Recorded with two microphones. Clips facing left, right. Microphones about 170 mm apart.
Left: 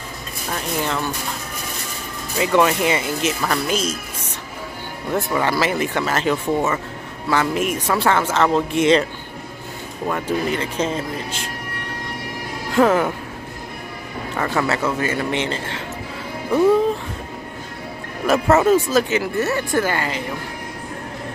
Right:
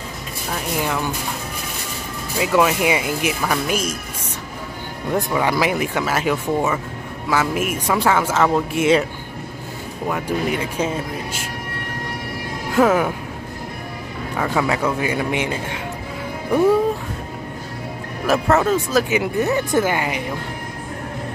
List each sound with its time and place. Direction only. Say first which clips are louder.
0.5 s speech: even; 10° right (ahead or behind)
2.3 s speech: even; 5° right (ahead or behind)
5.3 s speech: even; 10° right (ahead or behind)
10.0 s speech: even; 10° right (ahead or behind)
12.7 s speech: even; 5° right (ahead or behind)
14.3 s speech: right 1 dB; 10° right (ahead or behind)
18.2 s speech: left 2 dB; 5° left (ahead or behind)
19.0 s speech: right 1 dB; 15° right (ahead or behind)